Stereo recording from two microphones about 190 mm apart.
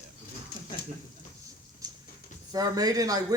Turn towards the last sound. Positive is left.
turn(degrees=-20)  # may be behind; listen again after turning